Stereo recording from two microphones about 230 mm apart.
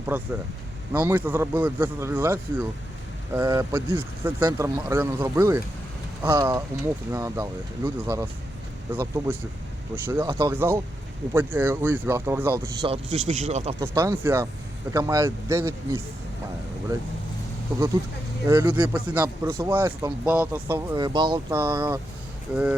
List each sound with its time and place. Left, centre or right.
0.1 s speech: centre
12.9 s speech: right
13.7 s speech: centre
18.4 s speech: centre